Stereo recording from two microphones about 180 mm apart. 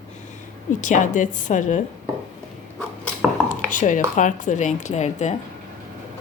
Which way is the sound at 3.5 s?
45° left (ahead or behind).